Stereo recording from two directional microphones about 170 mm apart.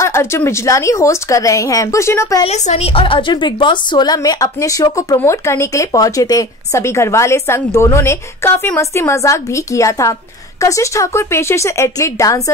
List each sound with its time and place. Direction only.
0.0 s speech: 15° left (ahead or behind)
2.4 s a woman's voice: 40° left (ahead or behind); by 12.4 s 20° left (ahead or behind)